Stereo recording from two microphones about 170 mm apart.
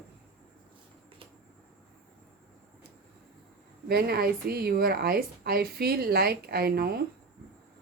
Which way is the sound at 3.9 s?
65° right (ahead or behind).